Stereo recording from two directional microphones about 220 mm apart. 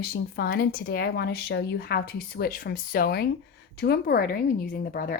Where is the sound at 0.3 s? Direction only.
45° left (ahead or behind).